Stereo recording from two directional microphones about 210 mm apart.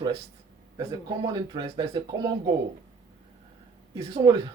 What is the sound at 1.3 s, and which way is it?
Speech, 20° right (ahead or behind).